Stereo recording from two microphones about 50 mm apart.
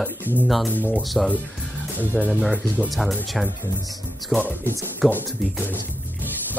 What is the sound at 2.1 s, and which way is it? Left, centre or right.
Speech, left.